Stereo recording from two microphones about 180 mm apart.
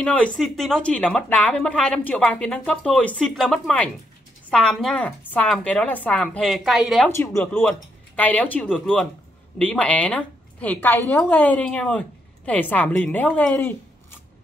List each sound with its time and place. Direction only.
0.0 s speech: 5° left (ahead or behind)
7.1 s a woman's voice: 15° left (ahead or behind)